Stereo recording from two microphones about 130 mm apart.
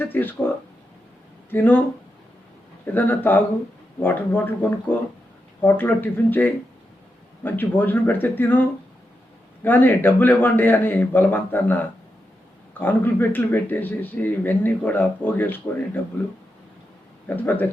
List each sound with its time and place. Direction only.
0.0 s speech: 15° left (ahead or behind)
2.8 s speech: 15° left (ahead or behind)
5.6 s speech: 15° left (ahead or behind)
9.6 s speech: 15° left (ahead or behind)
12.8 s speech: 15° left (ahead or behind)
17.2 s speech: 15° left (ahead or behind)